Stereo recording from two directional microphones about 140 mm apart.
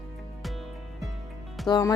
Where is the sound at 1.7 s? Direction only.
30° left (ahead or behind).